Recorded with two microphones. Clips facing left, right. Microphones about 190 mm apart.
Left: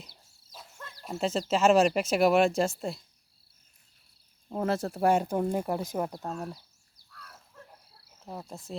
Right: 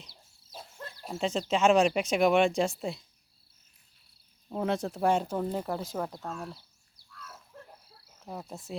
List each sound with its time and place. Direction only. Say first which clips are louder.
0.5 s a sound: right 3 dB; 30° right (ahead or behind)
1.2 s speech: left 1 dB; 5° left (ahead or behind)
4.4 s speech: left 1 dB; 5° left (ahead or behind)
6.1 s speech: left 3 dB; 40° left (ahead or behind)
8.2 s speech: even; centre (ahead or behind)